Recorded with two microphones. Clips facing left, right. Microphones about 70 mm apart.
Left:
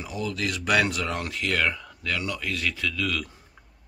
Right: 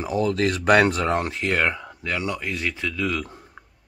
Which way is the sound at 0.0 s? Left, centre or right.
Right.